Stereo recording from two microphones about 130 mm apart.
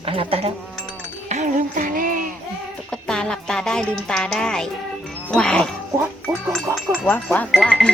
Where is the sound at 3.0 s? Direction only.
5° left (ahead or behind).